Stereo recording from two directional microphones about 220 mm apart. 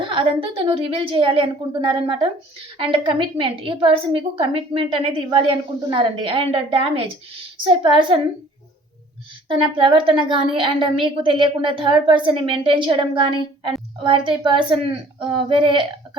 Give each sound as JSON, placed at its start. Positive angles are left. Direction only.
{"t": 0.0, "sound": "a woman's voice", "side_deg": -20}
{"t": 9.5, "sound": "a woman's voice", "side_deg": -20}